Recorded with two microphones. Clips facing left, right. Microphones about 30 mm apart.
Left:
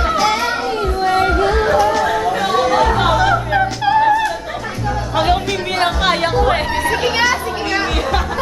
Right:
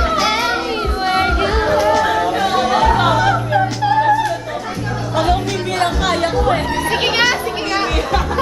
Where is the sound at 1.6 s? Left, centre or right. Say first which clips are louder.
Even; centre.